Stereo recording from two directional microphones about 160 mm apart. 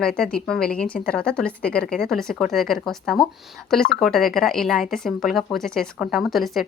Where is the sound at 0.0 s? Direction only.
5° left (ahead or behind).